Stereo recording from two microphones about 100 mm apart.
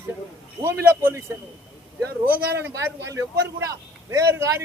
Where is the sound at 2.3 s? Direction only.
20° right (ahead or behind).